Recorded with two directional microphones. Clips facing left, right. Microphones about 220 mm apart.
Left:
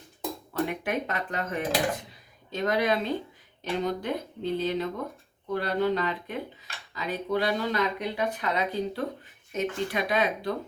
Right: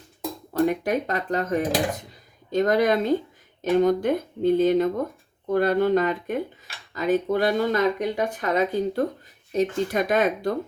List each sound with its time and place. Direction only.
0.6 s speech: 40° right (ahead or behind)